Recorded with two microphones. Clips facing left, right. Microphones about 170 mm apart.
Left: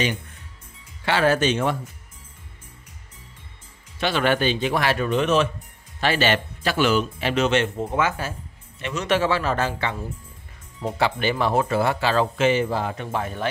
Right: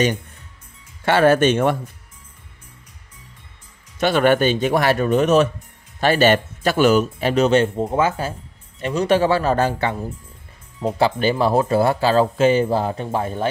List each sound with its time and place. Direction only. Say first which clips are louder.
1.0 s speech: right 5 dB; 50° right (ahead or behind)
4.0 s speech: right 5 dB; 50° right (ahead or behind); by 13.5 s 30° right (ahead or behind)